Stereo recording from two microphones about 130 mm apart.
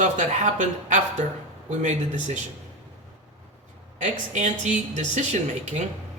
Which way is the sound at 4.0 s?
70° right (ahead or behind).